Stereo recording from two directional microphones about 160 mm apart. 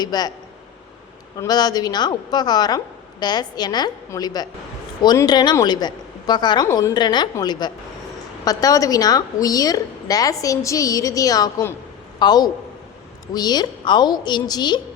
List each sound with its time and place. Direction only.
0.0 s a woman's voice: 25° left (ahead or behind)
1.4 s a woman's voice: 25° left (ahead or behind)